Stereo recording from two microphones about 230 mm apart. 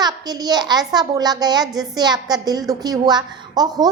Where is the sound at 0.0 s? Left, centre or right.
Centre.